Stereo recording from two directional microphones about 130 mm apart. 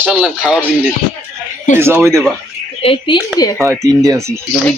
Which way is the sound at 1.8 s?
20° right (ahead or behind).